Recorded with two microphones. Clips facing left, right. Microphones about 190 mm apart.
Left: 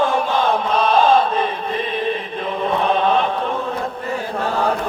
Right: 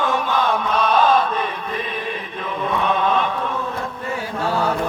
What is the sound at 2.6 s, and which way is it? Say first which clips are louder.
Chant: left 2 dB; 30° left (ahead or behind).